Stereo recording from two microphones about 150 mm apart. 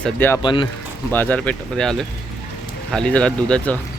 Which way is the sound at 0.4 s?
30° left (ahead or behind).